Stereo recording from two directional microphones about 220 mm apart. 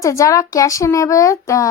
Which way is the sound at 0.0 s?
15° left (ahead or behind).